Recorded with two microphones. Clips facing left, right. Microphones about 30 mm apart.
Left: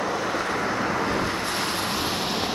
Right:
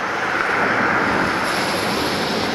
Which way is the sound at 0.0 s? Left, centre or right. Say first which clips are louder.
Right 5 dB; right.